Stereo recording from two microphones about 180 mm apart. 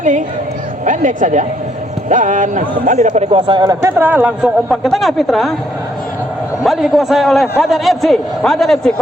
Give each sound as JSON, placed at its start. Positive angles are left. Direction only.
{"t": 0.9, "sound": "a man's voice", "side_deg": -45}
{"t": 6.6, "sound": "a man's voice", "side_deg": 0}